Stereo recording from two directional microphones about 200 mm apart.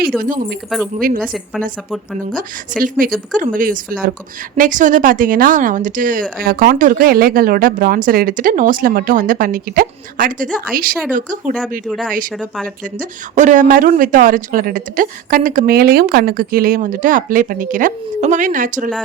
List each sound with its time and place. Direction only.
0.9 s speech: 45° right (ahead or behind)
2.7 s speech: 45° right (ahead or behind)
11.9 s speech: 5° left (ahead or behind)
13.0 s speech: 40° right (ahead or behind)